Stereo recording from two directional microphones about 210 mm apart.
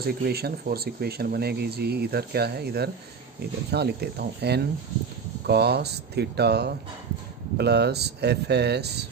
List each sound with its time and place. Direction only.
0.0 s speech: 45° right (ahead or behind)